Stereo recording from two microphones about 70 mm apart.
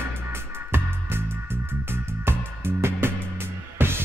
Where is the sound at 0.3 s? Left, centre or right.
Right.